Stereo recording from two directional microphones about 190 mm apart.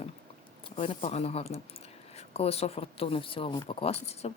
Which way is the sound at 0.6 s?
30° left (ahead or behind).